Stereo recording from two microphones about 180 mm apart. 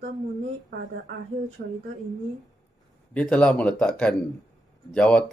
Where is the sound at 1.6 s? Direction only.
60° right (ahead or behind).